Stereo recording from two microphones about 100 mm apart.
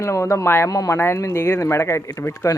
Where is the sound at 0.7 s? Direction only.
35° left (ahead or behind).